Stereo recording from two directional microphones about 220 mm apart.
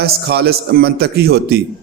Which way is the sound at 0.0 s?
45° right (ahead or behind).